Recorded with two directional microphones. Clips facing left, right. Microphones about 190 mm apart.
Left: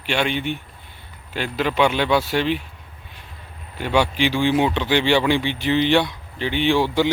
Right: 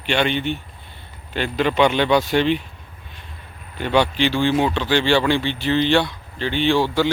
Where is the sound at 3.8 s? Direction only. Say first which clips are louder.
Right 1 dB; 10° left (ahead or behind).